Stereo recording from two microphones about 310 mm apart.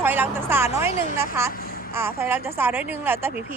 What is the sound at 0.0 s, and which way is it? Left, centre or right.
A woman's voice, centre.